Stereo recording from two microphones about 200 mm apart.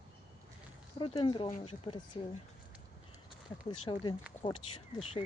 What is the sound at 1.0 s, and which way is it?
Speech, 25° left (ahead or behind).